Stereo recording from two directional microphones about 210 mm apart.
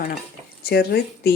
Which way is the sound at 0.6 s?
50° left (ahead or behind).